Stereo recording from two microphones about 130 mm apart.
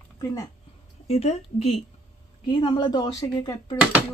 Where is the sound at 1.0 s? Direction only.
55° left (ahead or behind).